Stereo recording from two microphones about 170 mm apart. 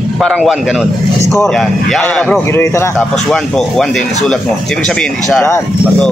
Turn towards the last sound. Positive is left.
turn(degrees=10)  # may be behind; listen again after turning